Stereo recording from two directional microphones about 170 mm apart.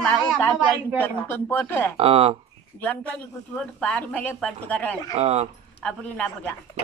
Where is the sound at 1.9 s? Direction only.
35° right (ahead or behind).